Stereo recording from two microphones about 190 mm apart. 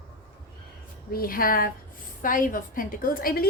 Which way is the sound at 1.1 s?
50° left (ahead or behind).